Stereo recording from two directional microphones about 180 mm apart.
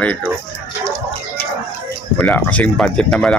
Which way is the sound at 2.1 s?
5° left (ahead or behind).